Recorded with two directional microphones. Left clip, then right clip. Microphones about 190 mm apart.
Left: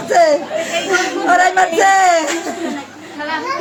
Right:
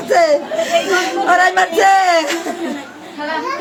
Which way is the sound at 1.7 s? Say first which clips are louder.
Right 1 dB; 10° right (ahead or behind).